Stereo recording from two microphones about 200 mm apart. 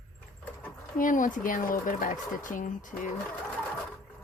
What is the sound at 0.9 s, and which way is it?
Speech, 40° left (ahead or behind).